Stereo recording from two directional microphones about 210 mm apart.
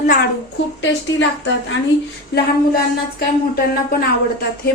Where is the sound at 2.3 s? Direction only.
50° left (ahead or behind).